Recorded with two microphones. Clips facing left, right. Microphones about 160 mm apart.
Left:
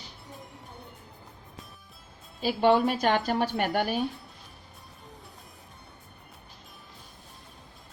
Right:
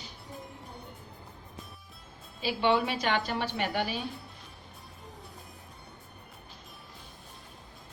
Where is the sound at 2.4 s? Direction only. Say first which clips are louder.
Left 5 dB; 45° left (ahead or behind).